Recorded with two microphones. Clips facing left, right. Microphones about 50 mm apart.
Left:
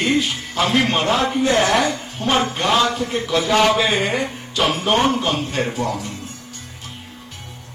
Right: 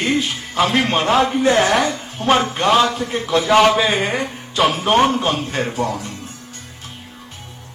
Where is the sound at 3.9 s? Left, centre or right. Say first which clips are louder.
Even; centre.